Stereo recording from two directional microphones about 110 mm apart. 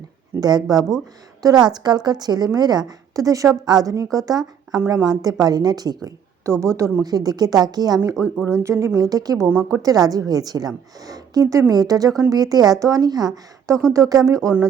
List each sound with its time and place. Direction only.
0.3 s a woman's voice: 35° right (ahead or behind)
8.1 s speech: 10° left (ahead or behind)
8.6 s a woman's voice: 25° right (ahead or behind)